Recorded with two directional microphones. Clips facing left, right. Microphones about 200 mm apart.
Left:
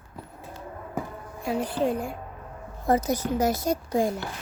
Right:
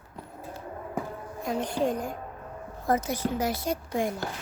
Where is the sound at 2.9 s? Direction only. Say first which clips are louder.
Left 3 dB; 35° left (ahead or behind).